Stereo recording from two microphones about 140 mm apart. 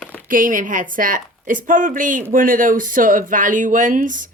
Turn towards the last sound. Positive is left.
turn(degrees=-70)  # may be behind; listen again after turning